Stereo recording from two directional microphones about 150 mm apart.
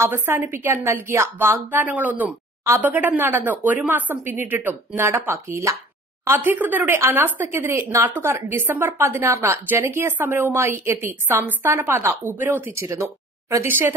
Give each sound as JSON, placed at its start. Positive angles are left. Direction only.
{"t": 0.0, "sound": "speech", "side_deg": -15}